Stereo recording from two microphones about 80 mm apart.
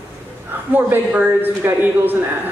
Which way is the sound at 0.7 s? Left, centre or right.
Right.